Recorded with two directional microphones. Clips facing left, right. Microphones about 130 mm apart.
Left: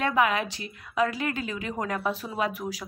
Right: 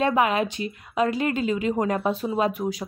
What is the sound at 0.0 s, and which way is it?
Speech, 25° right (ahead or behind).